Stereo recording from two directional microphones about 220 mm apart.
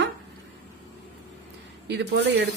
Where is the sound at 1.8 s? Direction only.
50° right (ahead or behind).